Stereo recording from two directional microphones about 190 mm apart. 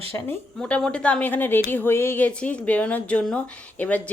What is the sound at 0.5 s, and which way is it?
A woman's voice, 5° left (ahead or behind).